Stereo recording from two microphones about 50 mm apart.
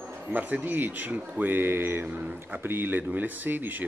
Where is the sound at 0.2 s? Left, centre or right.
Right.